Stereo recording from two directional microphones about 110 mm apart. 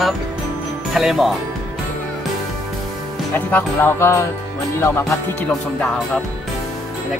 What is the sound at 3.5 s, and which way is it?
Music, 20° left (ahead or behind).